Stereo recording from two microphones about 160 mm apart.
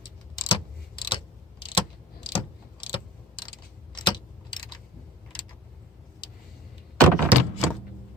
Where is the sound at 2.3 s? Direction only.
30° left (ahead or behind).